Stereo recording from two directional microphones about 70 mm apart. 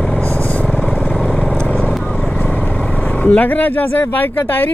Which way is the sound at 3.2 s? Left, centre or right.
Left.